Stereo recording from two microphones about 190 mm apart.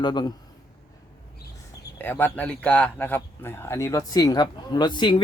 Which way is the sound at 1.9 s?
10° left (ahead or behind).